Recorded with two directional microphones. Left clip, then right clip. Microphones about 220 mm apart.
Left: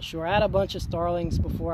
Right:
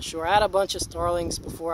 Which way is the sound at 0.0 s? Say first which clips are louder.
Right 3 dB; 20° right (ahead or behind).